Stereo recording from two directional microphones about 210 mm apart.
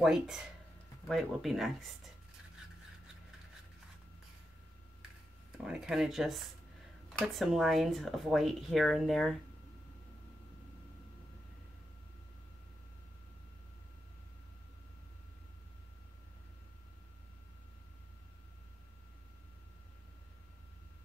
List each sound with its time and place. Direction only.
0.0 s speech: centre (ahead or behind)
5.6 s speech: 5° right (ahead or behind)